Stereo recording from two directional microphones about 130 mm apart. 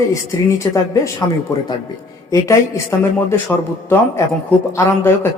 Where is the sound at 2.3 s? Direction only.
25° left (ahead or behind).